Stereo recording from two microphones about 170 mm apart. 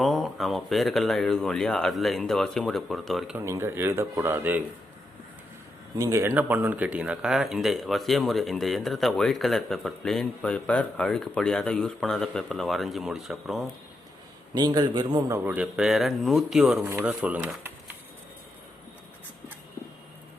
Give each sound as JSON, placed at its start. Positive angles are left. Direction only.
{"t": 0.0, "sound": "speech", "side_deg": 0}
{"t": 3.3, "sound": "speech", "side_deg": -15}
{"t": 6.0, "sound": "speech", "side_deg": -20}
{"t": 14.5, "sound": "a man's voice", "side_deg": -25}
{"t": 15.4, "sound": "speech", "side_deg": -5}